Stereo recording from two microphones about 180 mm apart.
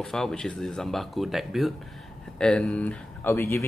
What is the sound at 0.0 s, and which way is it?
Speech, 5° left (ahead or behind).